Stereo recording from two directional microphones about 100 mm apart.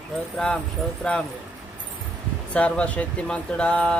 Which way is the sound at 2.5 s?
10° left (ahead or behind).